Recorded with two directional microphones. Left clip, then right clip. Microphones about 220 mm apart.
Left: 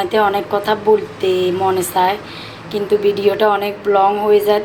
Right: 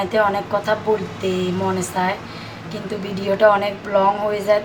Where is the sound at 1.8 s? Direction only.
20° left (ahead or behind).